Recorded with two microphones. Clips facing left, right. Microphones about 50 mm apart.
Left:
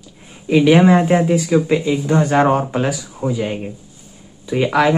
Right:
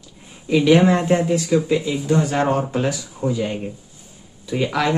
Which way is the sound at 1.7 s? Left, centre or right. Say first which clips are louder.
Left 3 dB; left.